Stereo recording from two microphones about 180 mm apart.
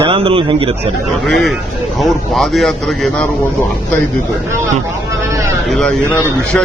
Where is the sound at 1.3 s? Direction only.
Centre (ahead or behind).